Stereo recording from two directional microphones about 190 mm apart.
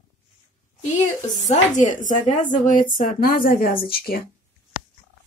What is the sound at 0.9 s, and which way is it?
A woman's voice, 40° left (ahead or behind).